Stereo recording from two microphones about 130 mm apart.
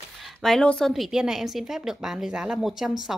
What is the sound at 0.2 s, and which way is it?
Speech, centre (ahead or behind).